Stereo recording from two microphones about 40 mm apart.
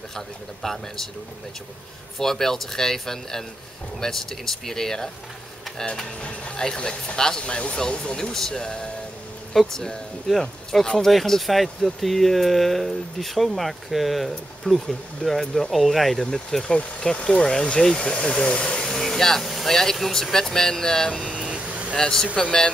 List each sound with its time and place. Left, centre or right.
0.6 s speech: centre
2.1 s speech: centre
6.2 s speech: left
8.2 s speech: centre
16.7 s speech: left
21.5 s vehicle: right
21.9 s speech: centre